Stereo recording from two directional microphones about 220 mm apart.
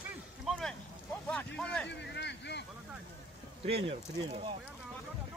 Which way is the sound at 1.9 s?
50° left (ahead or behind).